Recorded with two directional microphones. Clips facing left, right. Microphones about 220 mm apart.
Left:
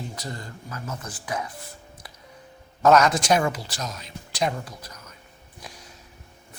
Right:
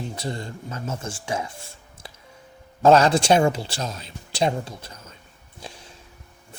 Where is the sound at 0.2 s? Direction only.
25° right (ahead or behind).